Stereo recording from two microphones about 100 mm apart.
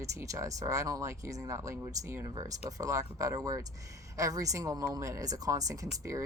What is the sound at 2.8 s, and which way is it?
Speech, 35° right (ahead or behind).